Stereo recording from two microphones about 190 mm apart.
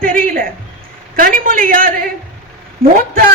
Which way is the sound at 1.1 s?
45° right (ahead or behind).